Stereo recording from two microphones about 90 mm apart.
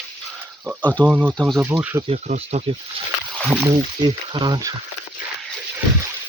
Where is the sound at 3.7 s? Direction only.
55° right (ahead or behind).